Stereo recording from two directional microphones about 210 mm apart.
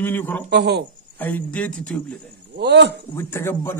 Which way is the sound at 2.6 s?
50° right (ahead or behind).